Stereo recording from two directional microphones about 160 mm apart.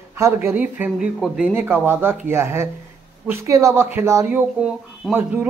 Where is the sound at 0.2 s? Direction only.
15° right (ahead or behind).